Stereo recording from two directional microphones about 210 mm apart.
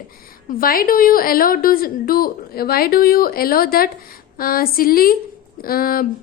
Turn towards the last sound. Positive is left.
turn(degrees=45)  # may be behind; listen again after turning